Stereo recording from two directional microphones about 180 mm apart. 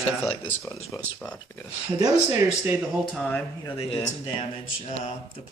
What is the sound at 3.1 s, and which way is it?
Speech, 5° left (ahead or behind).